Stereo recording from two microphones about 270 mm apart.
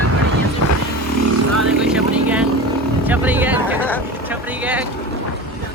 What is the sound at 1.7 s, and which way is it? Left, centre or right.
Speech, centre.